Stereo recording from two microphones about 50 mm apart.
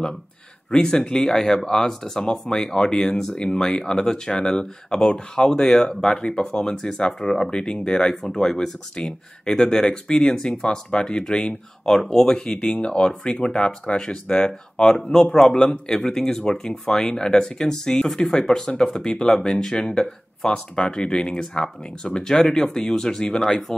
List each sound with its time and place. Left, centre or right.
0.7 s speech: centre